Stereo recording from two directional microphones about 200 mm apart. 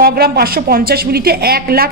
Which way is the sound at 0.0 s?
50° right (ahead or behind).